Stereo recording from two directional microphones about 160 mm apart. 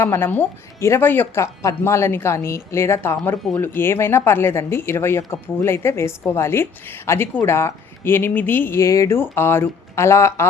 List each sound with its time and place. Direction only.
0.0 s speech: 15° left (ahead or behind)